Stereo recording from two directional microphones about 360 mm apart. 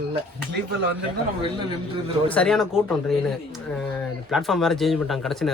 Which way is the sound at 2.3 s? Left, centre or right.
Centre.